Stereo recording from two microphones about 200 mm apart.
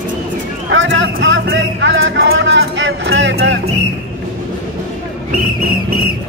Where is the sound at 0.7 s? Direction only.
70° right (ahead or behind).